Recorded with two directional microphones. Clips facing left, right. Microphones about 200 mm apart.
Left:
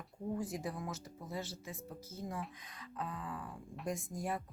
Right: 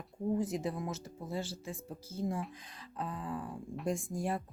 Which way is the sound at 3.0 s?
30° right (ahead or behind).